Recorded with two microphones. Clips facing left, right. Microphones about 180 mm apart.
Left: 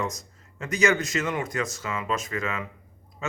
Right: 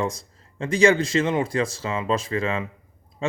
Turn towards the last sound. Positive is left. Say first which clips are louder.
# right 7 dB
turn(degrees=-30)  # may be behind; listen again after turning